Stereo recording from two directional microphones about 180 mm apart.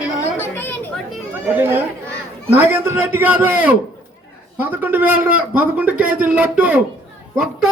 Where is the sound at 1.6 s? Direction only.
10° right (ahead or behind).